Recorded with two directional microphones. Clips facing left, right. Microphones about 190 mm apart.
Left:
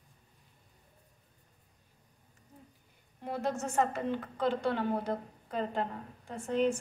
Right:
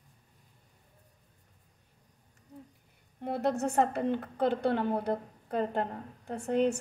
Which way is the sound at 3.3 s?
65° right (ahead or behind).